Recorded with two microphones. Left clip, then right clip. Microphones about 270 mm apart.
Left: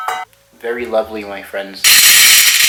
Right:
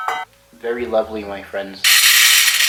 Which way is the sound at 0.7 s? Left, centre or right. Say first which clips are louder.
Left 2 dB; centre.